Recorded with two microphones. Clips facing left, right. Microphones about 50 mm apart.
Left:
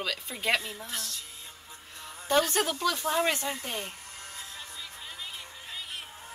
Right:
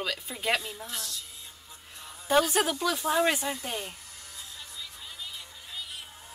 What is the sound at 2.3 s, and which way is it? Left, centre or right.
Speech, centre.